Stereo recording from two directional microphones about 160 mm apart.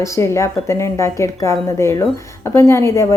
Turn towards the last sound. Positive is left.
turn(degrees=20)  # may be behind; listen again after turning